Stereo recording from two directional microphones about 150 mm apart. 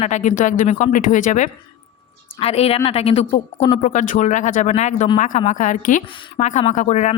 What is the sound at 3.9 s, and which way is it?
Speech, 55° left (ahead or behind).